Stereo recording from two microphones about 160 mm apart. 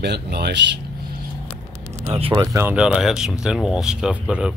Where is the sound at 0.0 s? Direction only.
90° right.